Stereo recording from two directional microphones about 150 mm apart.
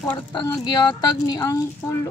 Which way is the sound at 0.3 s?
30° left (ahead or behind).